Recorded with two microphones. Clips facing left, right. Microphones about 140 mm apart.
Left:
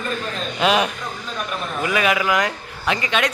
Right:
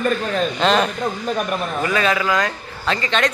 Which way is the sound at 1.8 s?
15° left (ahead or behind).